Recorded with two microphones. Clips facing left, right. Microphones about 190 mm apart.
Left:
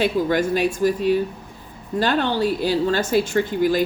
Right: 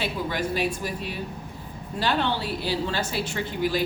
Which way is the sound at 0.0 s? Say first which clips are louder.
Left 9 dB; 50° left (ahead or behind).